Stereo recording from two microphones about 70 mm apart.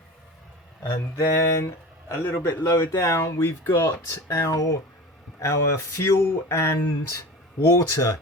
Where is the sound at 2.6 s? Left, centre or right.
Left.